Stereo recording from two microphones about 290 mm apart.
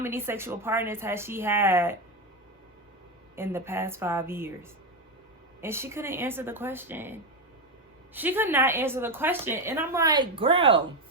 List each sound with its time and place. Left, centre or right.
0.0 s a woman's voice: centre
3.3 s a woman's voice: centre
5.5 s a woman's voice: centre